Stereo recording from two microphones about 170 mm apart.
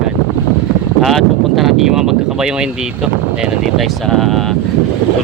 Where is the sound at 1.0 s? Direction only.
Centre (ahead or behind).